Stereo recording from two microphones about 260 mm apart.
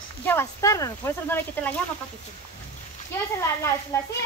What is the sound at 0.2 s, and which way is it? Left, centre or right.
Speech, centre.